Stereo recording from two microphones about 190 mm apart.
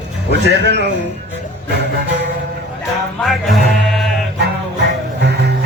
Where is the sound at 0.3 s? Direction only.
65° right (ahead or behind).